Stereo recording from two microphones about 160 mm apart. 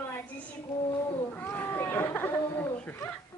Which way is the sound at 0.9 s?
15° left (ahead or behind).